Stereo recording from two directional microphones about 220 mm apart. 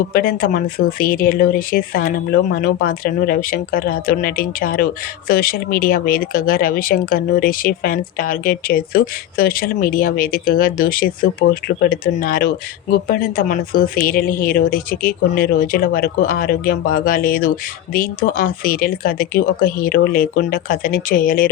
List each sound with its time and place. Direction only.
0.1 s speech: 40° left (ahead or behind)